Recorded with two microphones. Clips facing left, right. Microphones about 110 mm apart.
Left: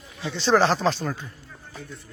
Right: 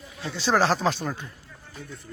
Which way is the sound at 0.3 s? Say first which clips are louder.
Left 2 dB; 5° right (ahead or behind).